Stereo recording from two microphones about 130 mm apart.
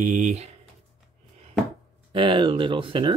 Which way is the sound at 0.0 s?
70° right (ahead or behind).